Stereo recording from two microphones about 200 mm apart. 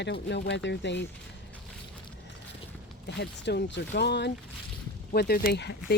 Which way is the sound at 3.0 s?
55° left (ahead or behind).